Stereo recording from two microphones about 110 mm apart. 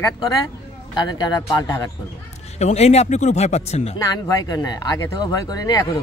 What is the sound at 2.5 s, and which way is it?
Speech, 80° left.